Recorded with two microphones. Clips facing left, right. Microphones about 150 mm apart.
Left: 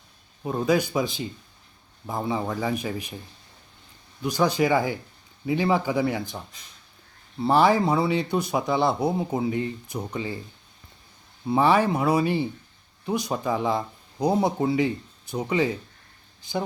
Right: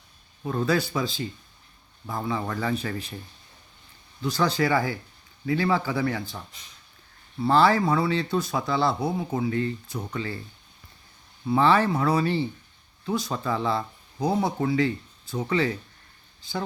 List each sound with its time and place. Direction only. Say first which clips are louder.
0.4 s speech: left 2 dB; 15° left (ahead or behind)
4.2 s speech: left 2 dB; 15° left (ahead or behind)
11.4 s speech: left 1 dB; 15° left (ahead or behind)